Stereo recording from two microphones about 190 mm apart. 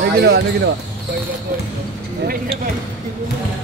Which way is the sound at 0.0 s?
60° right (ahead or behind).